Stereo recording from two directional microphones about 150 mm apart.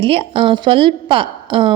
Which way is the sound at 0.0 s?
35° right (ahead or behind).